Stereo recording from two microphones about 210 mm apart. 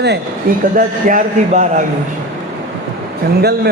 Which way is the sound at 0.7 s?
40° right (ahead or behind).